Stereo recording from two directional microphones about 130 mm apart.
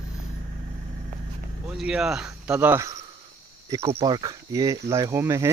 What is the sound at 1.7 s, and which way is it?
Speech, 5° right (ahead or behind).